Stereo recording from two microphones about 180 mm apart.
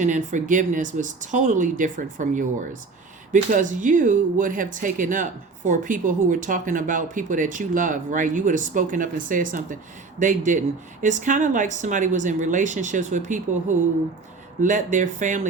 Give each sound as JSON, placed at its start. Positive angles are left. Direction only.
{"t": 0.0, "sound": "speech", "side_deg": -45}